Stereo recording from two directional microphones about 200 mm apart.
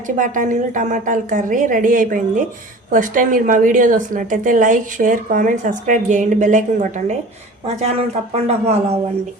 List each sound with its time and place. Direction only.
0.2 s a woman's voice: 40° right (ahead or behind)